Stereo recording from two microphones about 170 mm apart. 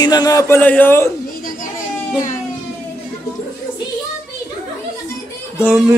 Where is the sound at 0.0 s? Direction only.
20° left (ahead or behind).